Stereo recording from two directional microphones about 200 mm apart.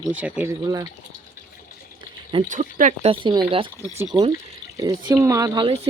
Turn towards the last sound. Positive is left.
turn(degrees=-25)  # may be behind; listen again after turning